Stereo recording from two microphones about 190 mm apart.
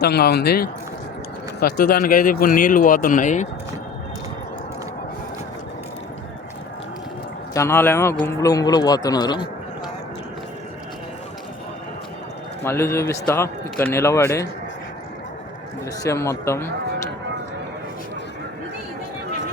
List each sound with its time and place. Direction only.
0.0 s speech: 55° left (ahead or behind); by 3.5 s 40° left (ahead or behind)
7.5 s a man's voice: 15° left (ahead or behind)
12.6 s a man's voice: 15° left (ahead or behind)
16.0 s a man's voice: 15° left (ahead or behind)